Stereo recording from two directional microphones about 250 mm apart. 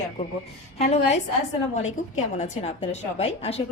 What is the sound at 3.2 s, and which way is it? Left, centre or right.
Speech, left.